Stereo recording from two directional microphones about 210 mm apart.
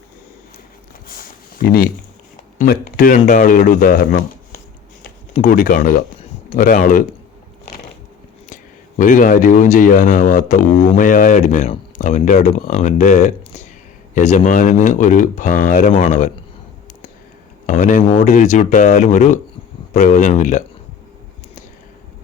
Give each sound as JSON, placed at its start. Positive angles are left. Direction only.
{"t": 1.5, "sound": "speech", "side_deg": 45}
{"t": 9.0, "sound": "speech", "side_deg": 40}
{"t": 17.7, "sound": "speech", "side_deg": 40}